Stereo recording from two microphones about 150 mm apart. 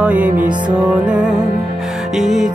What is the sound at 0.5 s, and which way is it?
Music, 30° right (ahead or behind).